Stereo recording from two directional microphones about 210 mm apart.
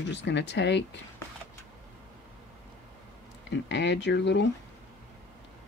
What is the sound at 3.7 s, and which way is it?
Speech, 55° left (ahead or behind).